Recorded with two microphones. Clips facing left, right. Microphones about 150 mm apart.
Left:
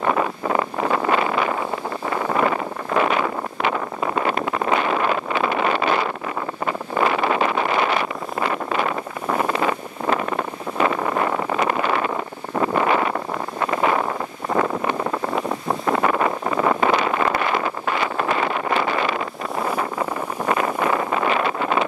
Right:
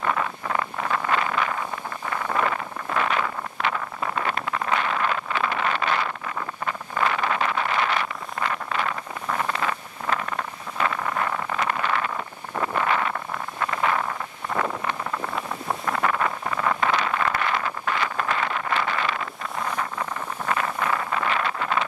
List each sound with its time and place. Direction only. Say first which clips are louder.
0.1 s wind noise: left 6 dB; 25° left (ahead or behind)
14.5 s vehicle: left 6 dB; 25° left (ahead or behind)
16.9 s wind noise: left 5 dB; 15° left (ahead or behind)